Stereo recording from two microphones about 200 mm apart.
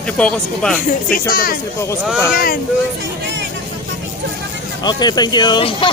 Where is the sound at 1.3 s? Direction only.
45° left (ahead or behind).